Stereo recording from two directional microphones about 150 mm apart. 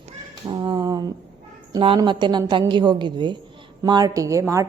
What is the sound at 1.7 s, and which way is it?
A woman's voice, 35° right (ahead or behind).